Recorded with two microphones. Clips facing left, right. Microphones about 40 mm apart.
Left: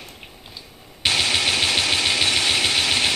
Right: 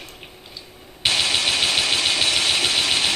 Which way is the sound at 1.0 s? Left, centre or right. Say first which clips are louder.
Even; centre.